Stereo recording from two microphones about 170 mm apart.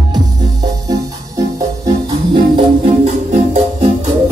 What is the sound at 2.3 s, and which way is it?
Music, 30° right (ahead or behind).